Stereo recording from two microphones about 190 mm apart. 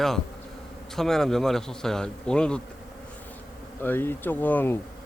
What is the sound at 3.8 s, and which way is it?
Speech, 10° left (ahead or behind).